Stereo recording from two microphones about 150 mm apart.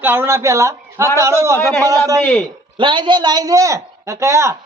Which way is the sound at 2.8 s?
30° right (ahead or behind).